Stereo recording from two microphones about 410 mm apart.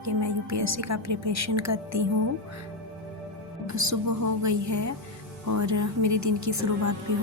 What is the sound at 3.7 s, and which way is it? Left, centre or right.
Speech, right.